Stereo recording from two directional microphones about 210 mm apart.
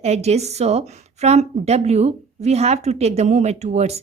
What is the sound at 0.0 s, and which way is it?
A woman's voice, 30° right (ahead or behind).